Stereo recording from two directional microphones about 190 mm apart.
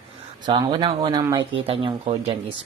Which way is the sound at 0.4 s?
25° right (ahead or behind).